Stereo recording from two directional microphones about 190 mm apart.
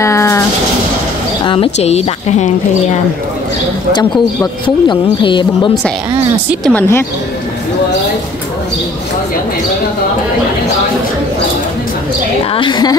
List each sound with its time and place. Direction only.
0.0 s a sound: 15° left (ahead or behind)
1.4 s a woman's voice: 30° left (ahead or behind)
4.6 s speech: 25° left (ahead or behind)
6.6 s speech: 10° left (ahead or behind)
12.5 s speech: 25° left (ahead or behind)